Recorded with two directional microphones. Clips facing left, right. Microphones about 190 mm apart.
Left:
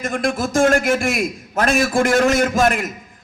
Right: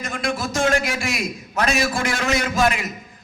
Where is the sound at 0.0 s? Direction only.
50° left (ahead or behind).